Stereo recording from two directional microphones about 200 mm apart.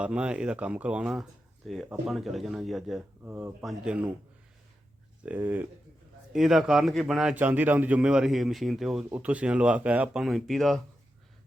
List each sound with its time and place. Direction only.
0.0 s speech: 5° right (ahead or behind)
3.2 s speech: 10° right (ahead or behind)
5.2 s speech: 10° right (ahead or behind)